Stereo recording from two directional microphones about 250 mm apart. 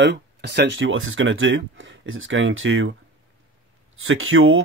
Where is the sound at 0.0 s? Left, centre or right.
Right.